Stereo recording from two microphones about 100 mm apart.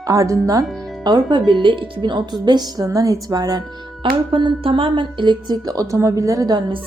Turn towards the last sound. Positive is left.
turn(degrees=-40)  # may be behind; listen again after turning